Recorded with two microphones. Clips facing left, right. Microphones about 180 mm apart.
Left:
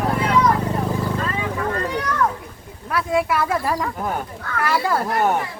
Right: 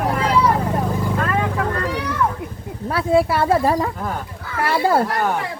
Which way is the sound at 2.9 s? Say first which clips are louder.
Right 4 dB; 30° right (ahead or behind).